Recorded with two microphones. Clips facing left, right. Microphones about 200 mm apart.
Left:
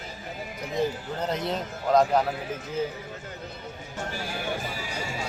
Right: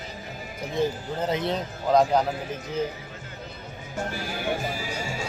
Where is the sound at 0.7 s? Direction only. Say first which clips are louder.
Right 2 dB; centre (ahead or behind).